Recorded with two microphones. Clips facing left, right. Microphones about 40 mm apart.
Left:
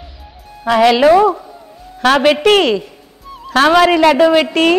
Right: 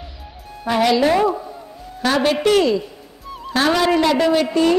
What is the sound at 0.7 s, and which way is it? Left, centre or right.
A woman's voice, left.